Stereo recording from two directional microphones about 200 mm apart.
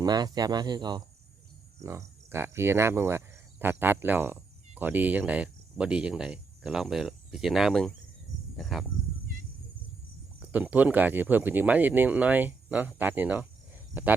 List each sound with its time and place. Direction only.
0.0 s speech: 20° right (ahead or behind)
1.8 s cricket: 15° right (ahead or behind); by 7.9 s centre (ahead or behind)
8.5 s speech: centre (ahead or behind)
10.4 s speech: 5° right (ahead or behind)